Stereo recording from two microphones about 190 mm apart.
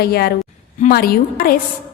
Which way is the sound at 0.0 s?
55° left (ahead or behind).